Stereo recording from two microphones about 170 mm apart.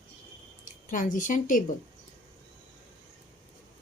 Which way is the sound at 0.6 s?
50° left (ahead or behind).